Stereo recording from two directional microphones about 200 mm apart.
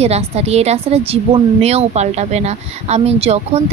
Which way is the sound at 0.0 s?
30° right (ahead or behind).